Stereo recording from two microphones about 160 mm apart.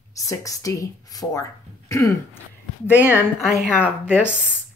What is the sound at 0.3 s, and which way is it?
Speech, 20° left (ahead or behind).